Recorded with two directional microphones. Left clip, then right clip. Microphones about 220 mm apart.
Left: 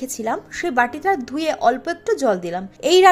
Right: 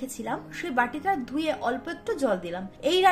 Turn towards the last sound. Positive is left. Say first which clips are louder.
# left 9 dB
turn(degrees=40)  # may be behind; listen again after turning